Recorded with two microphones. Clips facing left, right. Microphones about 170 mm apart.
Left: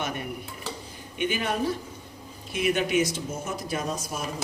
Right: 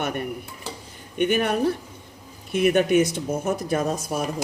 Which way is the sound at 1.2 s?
60° right (ahead or behind).